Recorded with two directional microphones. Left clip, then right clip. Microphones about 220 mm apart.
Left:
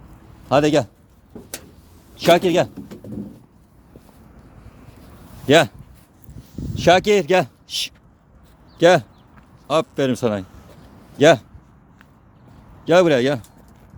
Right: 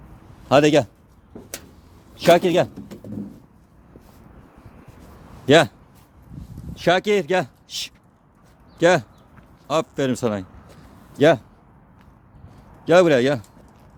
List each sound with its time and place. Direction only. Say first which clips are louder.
0.4 s a man's voice: right 1 dB; 20° right (ahead or behind)
2.1 s a man's voice: even; 10° right (ahead or behind)
5.5 s a man's voice: even; 5° right (ahead or behind)
6.7 s a man's voice: left 4 dB; 10° left (ahead or behind)
12.8 s a man's voice: even; 5° right (ahead or behind)